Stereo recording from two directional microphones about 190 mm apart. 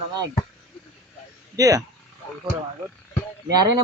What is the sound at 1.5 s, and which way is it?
Speech, 20° right (ahead or behind).